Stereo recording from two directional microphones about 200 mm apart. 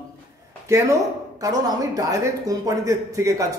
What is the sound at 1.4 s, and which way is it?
A woman's voice, 15° right (ahead or behind).